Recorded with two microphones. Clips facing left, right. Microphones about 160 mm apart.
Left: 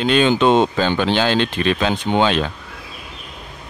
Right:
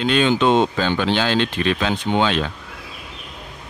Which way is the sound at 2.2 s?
20° left (ahead or behind).